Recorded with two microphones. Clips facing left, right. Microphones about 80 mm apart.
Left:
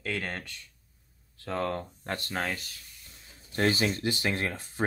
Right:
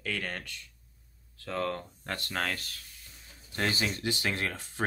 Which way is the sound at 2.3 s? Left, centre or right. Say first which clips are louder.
Even; centre.